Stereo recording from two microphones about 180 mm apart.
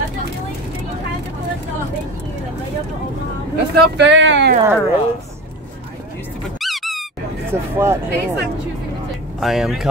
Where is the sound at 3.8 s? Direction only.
80° right.